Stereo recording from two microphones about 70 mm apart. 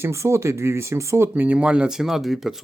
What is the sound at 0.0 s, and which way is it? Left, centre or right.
Speech, right.